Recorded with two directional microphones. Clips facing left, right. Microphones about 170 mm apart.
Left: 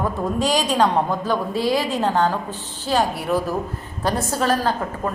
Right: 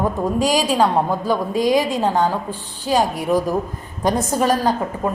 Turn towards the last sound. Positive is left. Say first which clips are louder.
# right 3 dB
turn(degrees=-15)  # may be behind; listen again after turning